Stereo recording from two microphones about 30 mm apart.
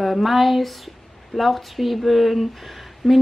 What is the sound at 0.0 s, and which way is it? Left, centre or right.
Speech, centre.